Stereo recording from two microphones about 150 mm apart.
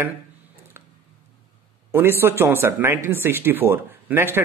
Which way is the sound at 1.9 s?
15° right (ahead or behind).